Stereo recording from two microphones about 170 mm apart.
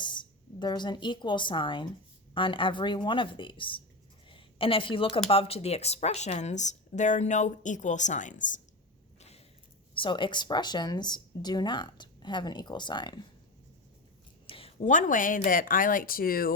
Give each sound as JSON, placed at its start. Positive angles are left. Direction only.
{"t": 0.0, "sound": "a woman's voice", "side_deg": 25}
{"t": 9.9, "sound": "speech", "side_deg": 30}
{"t": 14.4, "sound": "a sound", "side_deg": 35}
{"t": 14.8, "sound": "speech", "side_deg": 50}